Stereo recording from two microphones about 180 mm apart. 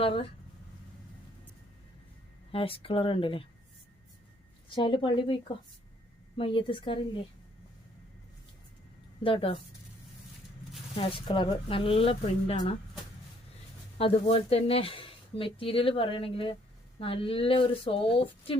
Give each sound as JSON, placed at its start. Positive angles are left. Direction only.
{"t": 0.0, "sound": "speech", "side_deg": 30}
{"t": 2.5, "sound": "speech", "side_deg": 30}
{"t": 4.7, "sound": "speech", "side_deg": 30}
{"t": 9.2, "sound": "speech", "side_deg": 30}
{"t": 10.9, "sound": "speech", "side_deg": 30}
{"t": 14.0, "sound": "speech", "side_deg": 30}